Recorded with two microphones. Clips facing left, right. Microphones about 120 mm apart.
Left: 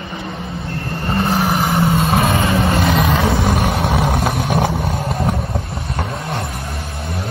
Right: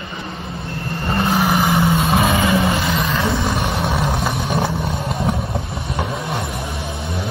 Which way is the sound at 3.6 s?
5° left (ahead or behind).